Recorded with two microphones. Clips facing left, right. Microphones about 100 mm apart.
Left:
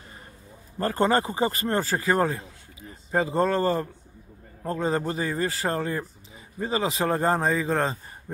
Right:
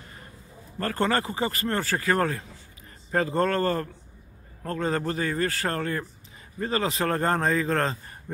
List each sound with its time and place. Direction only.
0.7 s a man's voice: 20° left (ahead or behind)